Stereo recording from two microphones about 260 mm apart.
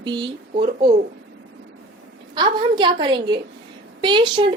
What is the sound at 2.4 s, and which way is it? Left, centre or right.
A woman's voice, centre.